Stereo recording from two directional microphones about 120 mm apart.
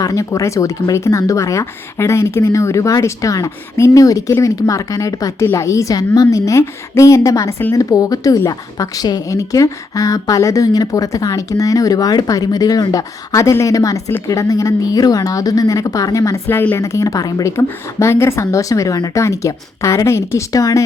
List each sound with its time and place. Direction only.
0.0 s a woman's voice: 30° left (ahead or behind)